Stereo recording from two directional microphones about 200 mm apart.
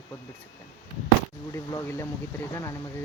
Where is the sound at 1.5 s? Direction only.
15° left (ahead or behind).